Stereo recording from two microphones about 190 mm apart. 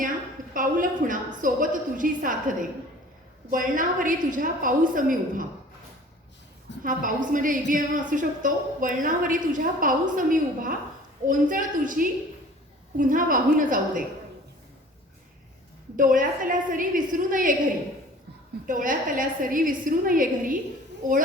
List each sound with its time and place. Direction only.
0.5 s a woman's voice: 45° right (ahead or behind)
6.8 s a woman's voice: 45° right (ahead or behind)
16.0 s a woman's voice: 45° right (ahead or behind)
18.6 s a woman's voice: 45° right (ahead or behind)